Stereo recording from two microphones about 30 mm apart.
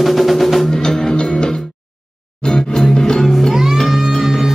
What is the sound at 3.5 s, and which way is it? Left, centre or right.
Music, centre.